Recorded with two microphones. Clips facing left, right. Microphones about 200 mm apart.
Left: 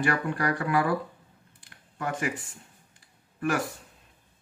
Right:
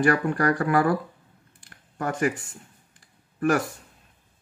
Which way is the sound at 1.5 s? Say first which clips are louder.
Right 5 dB; 45° right (ahead or behind).